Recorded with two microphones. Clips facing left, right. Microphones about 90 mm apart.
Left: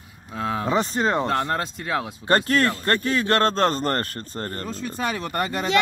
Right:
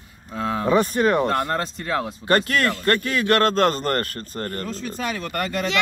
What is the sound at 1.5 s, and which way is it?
Speech, 10° left (ahead or behind).